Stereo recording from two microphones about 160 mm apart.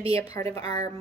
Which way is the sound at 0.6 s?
40° right (ahead or behind).